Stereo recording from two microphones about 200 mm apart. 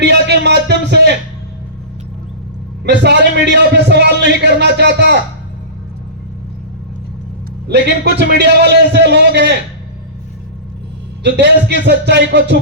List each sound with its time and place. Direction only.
0.0 s music: 60° right (ahead or behind)
2.8 s a man's voice: 60° right (ahead or behind)
7.7 s a man's voice: 55° right (ahead or behind)
11.2 s a man's voice: 60° right (ahead or behind)